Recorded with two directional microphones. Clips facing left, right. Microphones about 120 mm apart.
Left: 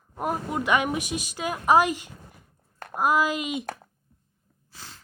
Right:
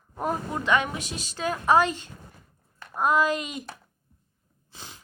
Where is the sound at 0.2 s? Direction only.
10° left (ahead or behind).